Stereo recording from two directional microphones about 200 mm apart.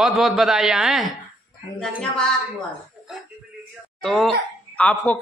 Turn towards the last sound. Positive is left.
turn(degrees=5)  # may be behind; listen again after turning